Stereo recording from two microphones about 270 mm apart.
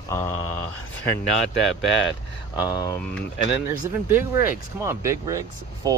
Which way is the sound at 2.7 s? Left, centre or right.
Centre.